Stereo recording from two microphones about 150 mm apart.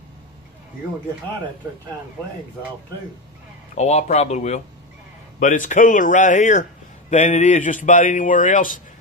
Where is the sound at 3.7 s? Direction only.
45° left (ahead or behind).